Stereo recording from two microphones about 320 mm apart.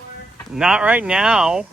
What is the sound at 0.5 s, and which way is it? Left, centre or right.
Speech, centre.